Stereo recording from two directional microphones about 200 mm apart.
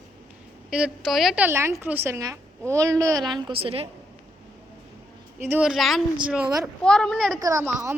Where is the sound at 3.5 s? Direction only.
25° right (ahead or behind).